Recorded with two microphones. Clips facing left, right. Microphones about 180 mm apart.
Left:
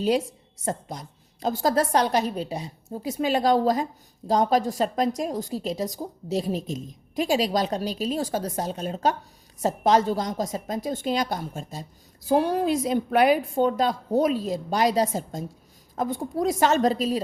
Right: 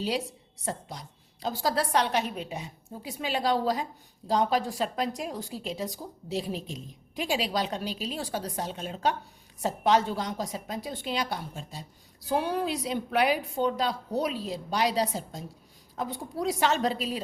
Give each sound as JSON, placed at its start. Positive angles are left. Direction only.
{"t": 0.6, "sound": "a woman's voice", "side_deg": 45}